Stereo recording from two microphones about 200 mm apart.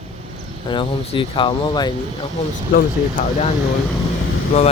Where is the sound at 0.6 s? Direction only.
25° left (ahead or behind).